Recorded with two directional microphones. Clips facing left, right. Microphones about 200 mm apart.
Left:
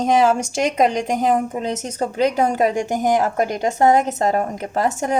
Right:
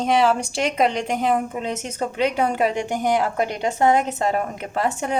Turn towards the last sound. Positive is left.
turn(degrees=40)  # may be behind; listen again after turning